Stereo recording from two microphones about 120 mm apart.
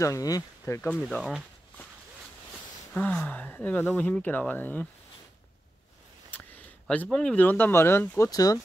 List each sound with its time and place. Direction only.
0.0 s speech: 30° left (ahead or behind)
0.9 s speech: centre (ahead or behind)
2.9 s speech: 10° left (ahead or behind)
6.3 s speech: 10° left (ahead or behind)
8.3 s speech: 30° left (ahead or behind)